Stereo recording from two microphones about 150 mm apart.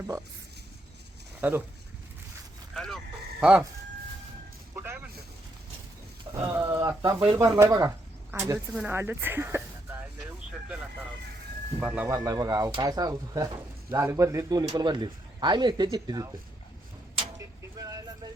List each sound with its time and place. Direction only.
1.4 s speech: 15° right (ahead or behind)
2.7 s a sound: 5° left (ahead or behind)
4.7 s vehicle: 15° right (ahead or behind)
6.3 s speech: 15° right (ahead or behind)
11.8 s speech: 10° right (ahead or behind)
17.3 s a sound: 25° right (ahead or behind)